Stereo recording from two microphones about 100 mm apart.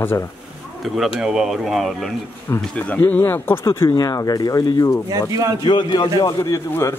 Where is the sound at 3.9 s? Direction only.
40° left (ahead or behind).